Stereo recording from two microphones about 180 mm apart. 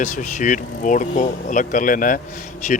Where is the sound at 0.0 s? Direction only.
45° left (ahead or behind).